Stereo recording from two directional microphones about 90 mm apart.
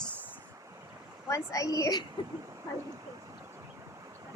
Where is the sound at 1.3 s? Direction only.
35° left (ahead or behind).